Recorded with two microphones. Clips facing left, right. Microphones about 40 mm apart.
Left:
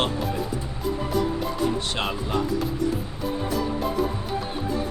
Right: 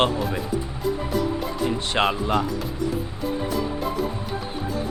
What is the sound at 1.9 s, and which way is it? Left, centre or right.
Speech, right.